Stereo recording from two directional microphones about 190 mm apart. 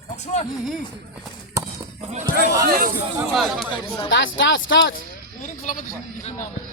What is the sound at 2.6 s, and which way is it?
Speech, 50° right (ahead or behind).